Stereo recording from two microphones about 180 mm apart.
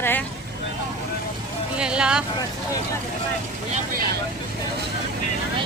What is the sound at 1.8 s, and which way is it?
Speech, 5° right (ahead or behind).